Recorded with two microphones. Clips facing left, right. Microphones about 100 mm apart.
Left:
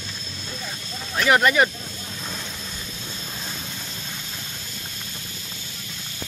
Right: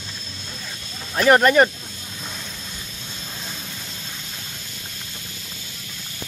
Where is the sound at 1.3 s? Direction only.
40° right (ahead or behind).